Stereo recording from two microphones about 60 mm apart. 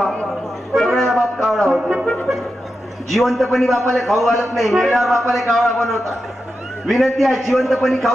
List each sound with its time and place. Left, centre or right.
0.7 s music: centre
1.8 s music: centre
3.1 s a man's voice: centre